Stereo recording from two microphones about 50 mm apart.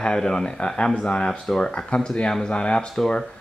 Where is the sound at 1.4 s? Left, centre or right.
Centre.